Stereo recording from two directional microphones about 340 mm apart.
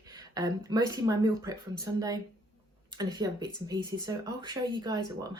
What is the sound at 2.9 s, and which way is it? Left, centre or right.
Speech, centre.